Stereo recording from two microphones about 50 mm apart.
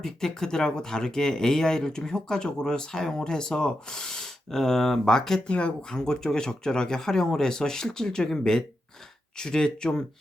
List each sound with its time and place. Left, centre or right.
0.0 s speech: centre
5.5 s speech: left